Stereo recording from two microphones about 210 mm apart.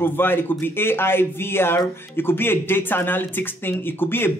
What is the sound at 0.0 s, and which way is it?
Speech, 10° left (ahead or behind).